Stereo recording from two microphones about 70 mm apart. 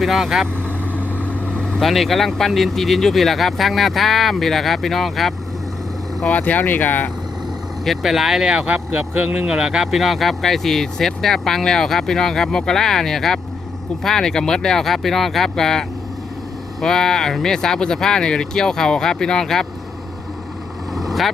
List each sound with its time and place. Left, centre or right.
0.0 s speech: centre
0.9 s speech: left; by 5.3 s centre
6.2 s speech: left
7.9 s speech: centre; by 9.5 s right
9.5 s speech: centre
20.9 s vehicle: centre